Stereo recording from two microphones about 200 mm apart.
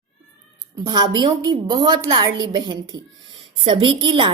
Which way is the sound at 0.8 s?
20° right (ahead or behind).